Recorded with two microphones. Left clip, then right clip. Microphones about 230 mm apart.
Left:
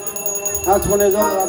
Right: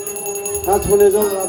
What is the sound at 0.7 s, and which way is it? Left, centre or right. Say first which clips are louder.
Jingle bell: left 1 dB; left.